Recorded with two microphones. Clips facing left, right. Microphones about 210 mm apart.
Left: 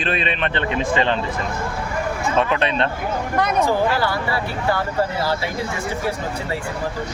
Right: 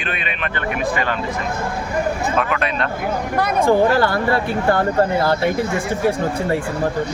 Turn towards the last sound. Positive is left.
turn(degrees=-55)  # may be behind; listen again after turning